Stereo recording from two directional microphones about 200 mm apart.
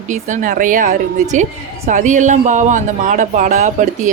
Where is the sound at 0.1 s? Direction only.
40° right (ahead or behind).